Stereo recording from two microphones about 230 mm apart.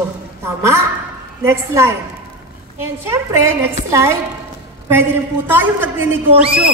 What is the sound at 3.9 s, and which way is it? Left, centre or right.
Speech, centre.